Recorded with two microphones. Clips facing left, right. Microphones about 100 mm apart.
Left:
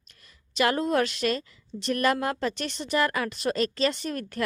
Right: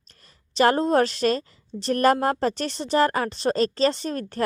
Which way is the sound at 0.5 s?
35° right (ahead or behind).